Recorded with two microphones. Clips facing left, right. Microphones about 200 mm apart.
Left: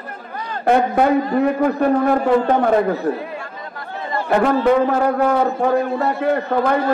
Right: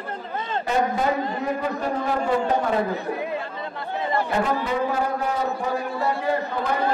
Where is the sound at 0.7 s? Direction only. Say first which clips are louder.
Left 8 dB; 60° left (ahead or behind).